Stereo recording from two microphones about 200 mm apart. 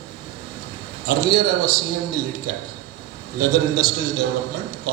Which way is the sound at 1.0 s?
50° right (ahead or behind).